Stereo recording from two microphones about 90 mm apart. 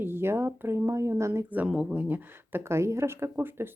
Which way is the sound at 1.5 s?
10° right (ahead or behind).